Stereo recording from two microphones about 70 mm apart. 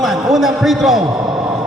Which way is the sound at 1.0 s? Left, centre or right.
Right.